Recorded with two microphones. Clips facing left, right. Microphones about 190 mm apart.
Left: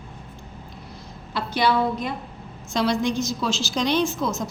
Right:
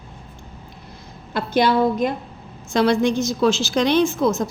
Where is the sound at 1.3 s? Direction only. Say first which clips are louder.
Right 4 dB; 50° right (ahead or behind).